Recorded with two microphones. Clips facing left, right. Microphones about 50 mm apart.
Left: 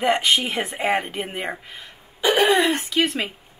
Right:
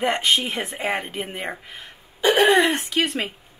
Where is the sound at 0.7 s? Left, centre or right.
Centre.